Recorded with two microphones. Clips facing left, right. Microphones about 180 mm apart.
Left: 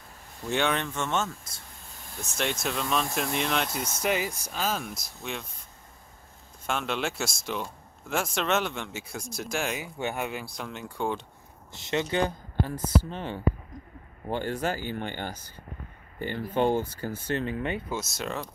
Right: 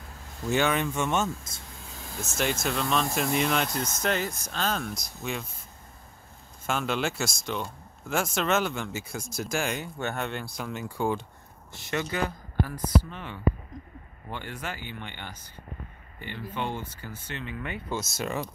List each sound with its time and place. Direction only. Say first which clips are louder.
0.5 s speech: right 2 dB; 5° right (ahead or behind)
2.1 s speech: right 2 dB; 5° right (ahead or behind)
6.6 s speech: right 1 dB; centre (ahead or behind)
9.9 s speech: even; 10° left (ahead or behind); by 11.2 s 5° right (ahead or behind)
11.7 s speech: left 3 dB; 20° left (ahead or behind); by 17.6 s 40° left (ahead or behind)
17.8 s speech: right 1 dB; centre (ahead or behind)